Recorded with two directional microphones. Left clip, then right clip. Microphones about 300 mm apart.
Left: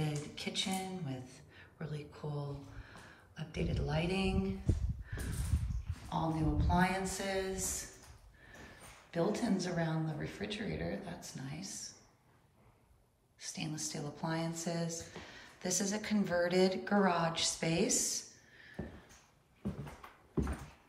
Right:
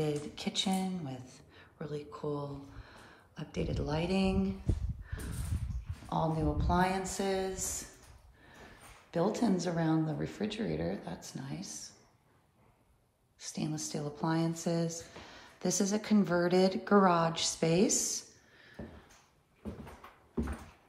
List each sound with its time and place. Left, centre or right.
0.0 s speech: centre
6.0 s speech: centre
9.1 s speech: centre
13.4 s speech: centre
17.6 s a sound: centre